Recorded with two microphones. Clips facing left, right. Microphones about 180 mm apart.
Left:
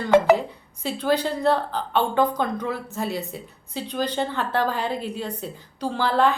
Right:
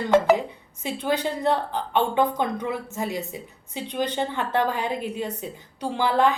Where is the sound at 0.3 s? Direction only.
15° right (ahead or behind).